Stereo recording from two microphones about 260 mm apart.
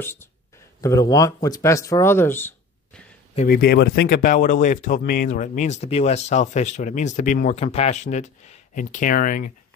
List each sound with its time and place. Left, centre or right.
0.0 s speech: centre
3.3 s speech: left